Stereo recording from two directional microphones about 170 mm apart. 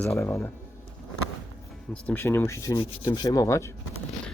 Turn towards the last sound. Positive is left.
turn(degrees=15)  # may be behind; listen again after turning